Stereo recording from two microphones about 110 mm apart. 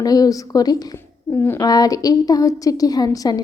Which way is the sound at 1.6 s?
35° left (ahead or behind).